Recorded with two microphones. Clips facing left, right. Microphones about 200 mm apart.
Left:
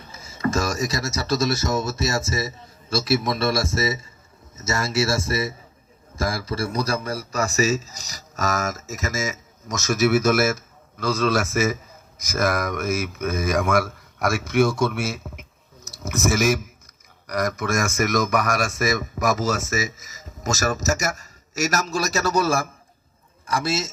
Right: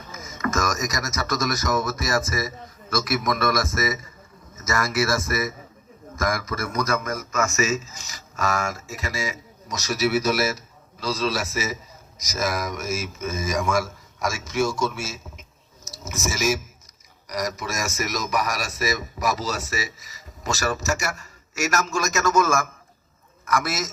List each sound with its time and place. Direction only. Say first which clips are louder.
0.0 s a man's voice: left 3 dB; 30° left (ahead or behind)